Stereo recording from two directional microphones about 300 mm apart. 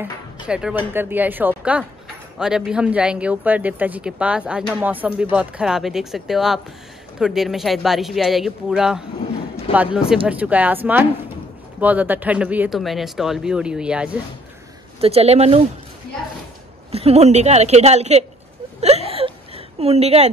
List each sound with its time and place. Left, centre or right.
0.0 s speech: centre
10.2 s speech: centre
15.0 s a woman's voice: centre
16.9 s a woman's voice: centre
18.8 s whimper: right